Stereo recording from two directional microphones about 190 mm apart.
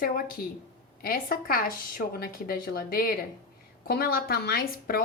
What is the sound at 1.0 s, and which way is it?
A woman's voice, 50° left (ahead or behind).